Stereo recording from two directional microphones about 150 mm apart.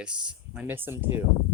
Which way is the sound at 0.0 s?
5° right (ahead or behind).